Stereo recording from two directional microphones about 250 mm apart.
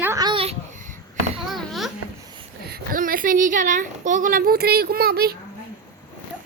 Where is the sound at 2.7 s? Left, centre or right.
Right.